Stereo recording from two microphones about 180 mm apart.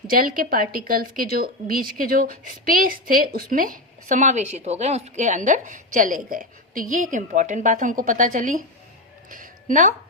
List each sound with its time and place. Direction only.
0.1 s a woman's voice: 50° right (ahead or behind)
9.3 s music: 45° right (ahead or behind)